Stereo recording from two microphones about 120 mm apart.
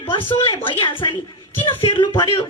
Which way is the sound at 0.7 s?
40° left (ahead or behind).